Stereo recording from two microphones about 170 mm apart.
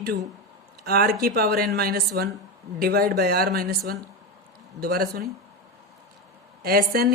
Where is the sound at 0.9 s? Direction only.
65° right (ahead or behind).